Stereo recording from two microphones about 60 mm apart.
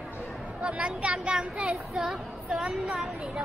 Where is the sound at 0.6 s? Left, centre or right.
Centre.